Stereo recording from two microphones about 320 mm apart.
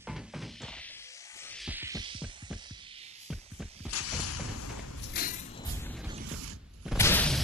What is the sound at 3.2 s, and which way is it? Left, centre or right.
Music, centre.